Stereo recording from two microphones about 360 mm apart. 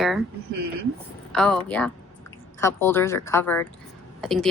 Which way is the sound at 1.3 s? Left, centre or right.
Centre.